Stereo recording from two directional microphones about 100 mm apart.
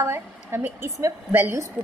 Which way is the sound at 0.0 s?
25° right (ahead or behind).